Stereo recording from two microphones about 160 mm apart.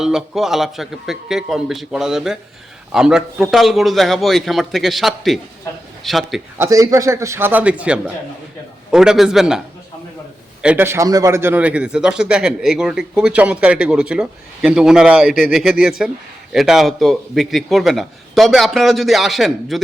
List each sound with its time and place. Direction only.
0.0 s a man's voice: 5° right (ahead or behind)
6.6 s a man's voice: 20° right (ahead or behind); by 9.6 s 5° right (ahead or behind)
10.6 s a man's voice: 10° right (ahead or behind)